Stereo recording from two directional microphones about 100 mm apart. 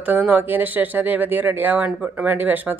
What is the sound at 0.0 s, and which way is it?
Speech, 15° right (ahead or behind).